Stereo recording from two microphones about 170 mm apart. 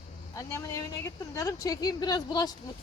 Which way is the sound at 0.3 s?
15° left (ahead or behind).